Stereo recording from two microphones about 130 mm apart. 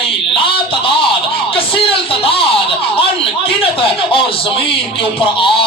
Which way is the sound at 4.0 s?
45° left (ahead or behind).